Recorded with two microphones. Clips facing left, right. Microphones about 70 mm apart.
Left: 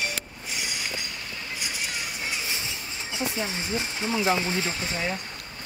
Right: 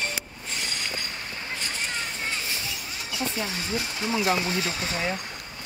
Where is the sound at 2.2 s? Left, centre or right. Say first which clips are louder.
Even; left.